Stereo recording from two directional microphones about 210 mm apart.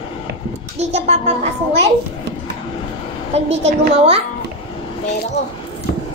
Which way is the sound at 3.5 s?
30° right (ahead or behind).